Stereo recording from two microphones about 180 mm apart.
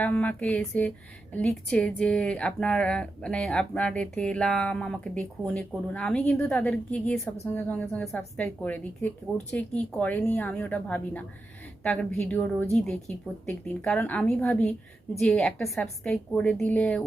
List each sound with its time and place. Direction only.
0.0 s a woman's voice: 10° left (ahead or behind)